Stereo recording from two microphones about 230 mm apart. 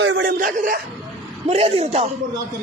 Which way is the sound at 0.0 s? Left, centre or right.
Right.